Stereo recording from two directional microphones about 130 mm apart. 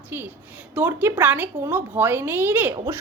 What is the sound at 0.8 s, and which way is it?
A woman's voice, 15° right (ahead or behind).